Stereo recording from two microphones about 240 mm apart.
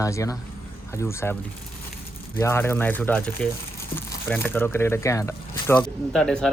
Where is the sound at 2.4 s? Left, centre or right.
Centre.